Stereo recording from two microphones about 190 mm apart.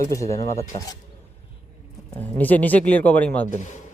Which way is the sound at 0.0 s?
15° left (ahead or behind).